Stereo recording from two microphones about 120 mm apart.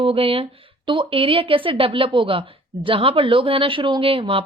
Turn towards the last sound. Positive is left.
turn(degrees=-50)  # may be behind; listen again after turning